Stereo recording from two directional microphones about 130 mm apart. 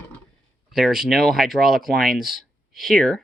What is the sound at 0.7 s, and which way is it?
Speech, 5° right (ahead or behind).